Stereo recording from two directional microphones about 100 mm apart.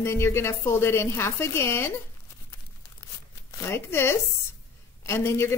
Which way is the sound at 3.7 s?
25° left (ahead or behind).